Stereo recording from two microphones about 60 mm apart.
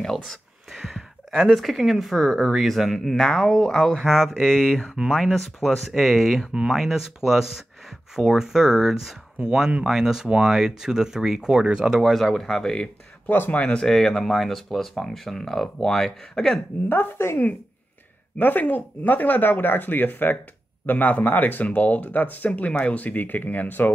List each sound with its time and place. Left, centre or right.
0.0 s speech: centre
0.7 s speech: centre
12.0 s speech: centre
16.9 s speech: left
18.4 s speech: left